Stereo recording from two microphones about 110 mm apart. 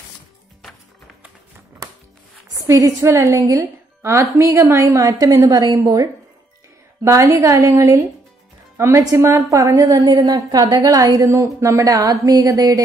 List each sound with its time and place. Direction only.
2.6 s a woman's voice: 30° right (ahead or behind)